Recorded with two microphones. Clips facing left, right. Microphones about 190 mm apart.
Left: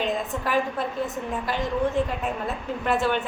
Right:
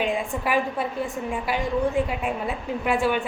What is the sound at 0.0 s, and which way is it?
A woman's voice, 10° right (ahead or behind).